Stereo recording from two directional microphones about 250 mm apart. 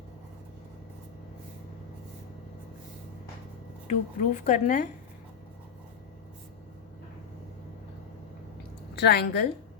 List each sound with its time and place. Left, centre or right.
3.8 s a woman's voice: left
9.0 s a woman's voice: left